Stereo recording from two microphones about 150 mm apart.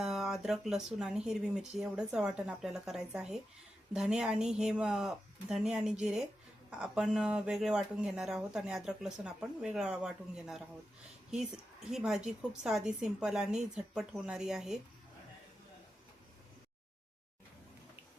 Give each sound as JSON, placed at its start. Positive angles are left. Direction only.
{"t": 0.0, "sound": "a woman's voice", "side_deg": 0}